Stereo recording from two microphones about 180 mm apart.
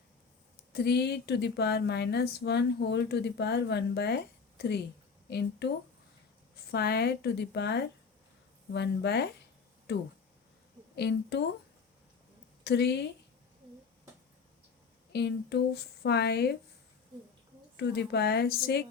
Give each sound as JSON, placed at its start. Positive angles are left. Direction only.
{"t": 0.7, "sound": "a woman's voice", "side_deg": 65}
{"t": 12.6, "sound": "a woman's voice", "side_deg": 65}
{"t": 15.1, "sound": "a woman's voice", "side_deg": 70}
{"t": 17.7, "sound": "a woman's voice", "side_deg": 70}